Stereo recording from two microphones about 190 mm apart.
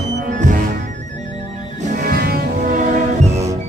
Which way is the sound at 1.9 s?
55° right (ahead or behind).